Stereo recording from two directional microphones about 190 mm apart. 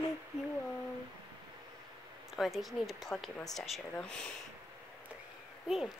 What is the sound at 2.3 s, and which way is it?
Speech, centre (ahead or behind).